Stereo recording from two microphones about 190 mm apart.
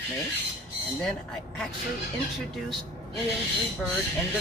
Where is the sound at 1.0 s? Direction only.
Centre (ahead or behind).